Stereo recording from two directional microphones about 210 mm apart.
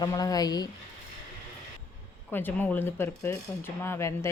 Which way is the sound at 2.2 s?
10° left (ahead or behind).